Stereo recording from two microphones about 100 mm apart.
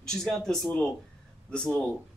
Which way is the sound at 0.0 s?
5° left (ahead or behind).